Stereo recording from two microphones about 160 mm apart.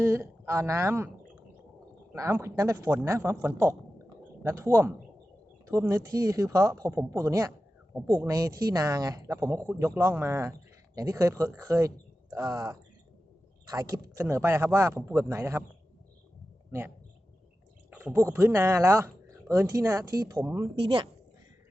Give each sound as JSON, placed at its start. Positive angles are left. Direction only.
{"t": 0.0, "sound": "speech", "side_deg": -15}
{"t": 2.1, "sound": "speech", "side_deg": -15}
{"t": 4.1, "sound": "a sound", "side_deg": -20}
{"t": 5.6, "sound": "speech", "side_deg": -15}
{"t": 17.9, "sound": "a sound", "side_deg": -10}
{"t": 18.3, "sound": "speech", "side_deg": -15}
{"t": 20.8, "sound": "a woman's voice", "side_deg": -30}